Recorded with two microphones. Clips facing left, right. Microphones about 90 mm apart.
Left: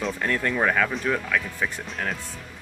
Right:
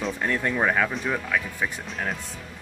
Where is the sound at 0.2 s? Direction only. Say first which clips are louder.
Even; 15° right (ahead or behind).